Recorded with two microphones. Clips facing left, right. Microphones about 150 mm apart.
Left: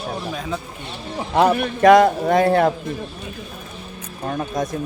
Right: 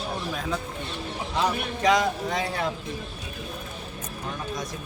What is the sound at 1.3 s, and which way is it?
A man's voice, 55° left (ahead or behind).